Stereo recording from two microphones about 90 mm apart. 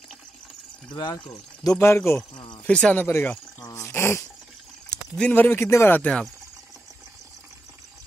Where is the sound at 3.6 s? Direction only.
35° left (ahead or behind).